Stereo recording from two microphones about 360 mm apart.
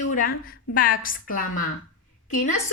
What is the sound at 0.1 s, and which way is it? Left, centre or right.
A woman's voice, left.